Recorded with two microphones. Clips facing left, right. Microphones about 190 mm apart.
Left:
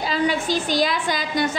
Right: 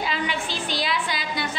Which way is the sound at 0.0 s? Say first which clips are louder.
Left 6 dB; 40° left (ahead or behind).